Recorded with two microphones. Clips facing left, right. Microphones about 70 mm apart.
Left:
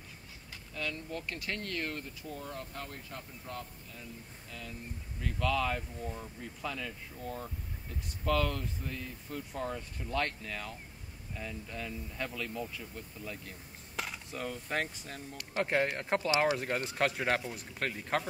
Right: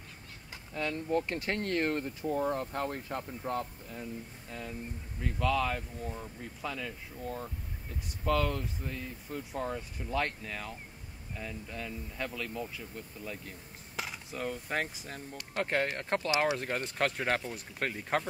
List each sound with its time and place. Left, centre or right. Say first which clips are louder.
0.7 s speech: right 7 dB; right
5.2 s speech: right 2 dB; centre